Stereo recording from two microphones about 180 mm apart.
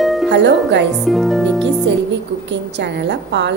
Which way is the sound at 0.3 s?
75° right (ahead or behind).